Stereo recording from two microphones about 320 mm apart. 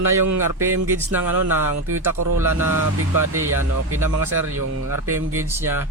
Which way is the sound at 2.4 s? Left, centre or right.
Centre.